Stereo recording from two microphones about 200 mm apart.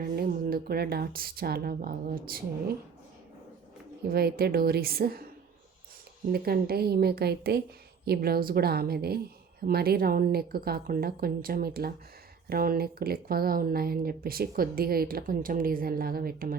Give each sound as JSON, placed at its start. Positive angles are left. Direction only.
{"t": 0.0, "sound": "speech", "side_deg": -50}
{"t": 4.1, "sound": "speech", "side_deg": -50}
{"t": 6.3, "sound": "speech", "side_deg": -50}